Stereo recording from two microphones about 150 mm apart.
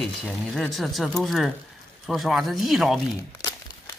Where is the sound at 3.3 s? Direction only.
20° left (ahead or behind).